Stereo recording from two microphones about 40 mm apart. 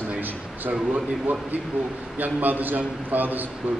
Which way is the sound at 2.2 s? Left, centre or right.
Right.